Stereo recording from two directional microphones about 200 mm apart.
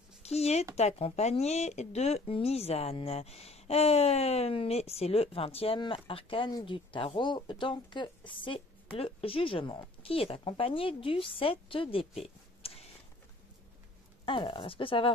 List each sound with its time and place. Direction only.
0.2 s speech: 30° left (ahead or behind)
14.2 s speech: 25° left (ahead or behind)